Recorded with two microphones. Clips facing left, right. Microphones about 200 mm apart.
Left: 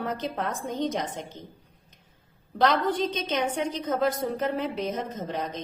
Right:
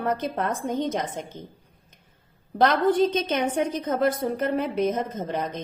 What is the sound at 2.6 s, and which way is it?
A woman's voice, 50° right (ahead or behind).